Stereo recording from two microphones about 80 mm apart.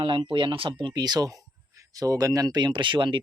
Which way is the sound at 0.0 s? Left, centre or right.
Right.